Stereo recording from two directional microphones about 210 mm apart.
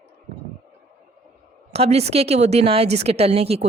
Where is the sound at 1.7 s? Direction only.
30° right (ahead or behind).